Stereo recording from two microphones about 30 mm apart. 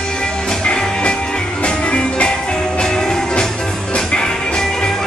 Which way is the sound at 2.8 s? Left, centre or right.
Centre.